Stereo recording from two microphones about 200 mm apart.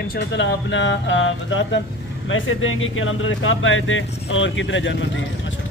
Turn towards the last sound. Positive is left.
turn(degrees=70)  # may be behind; listen again after turning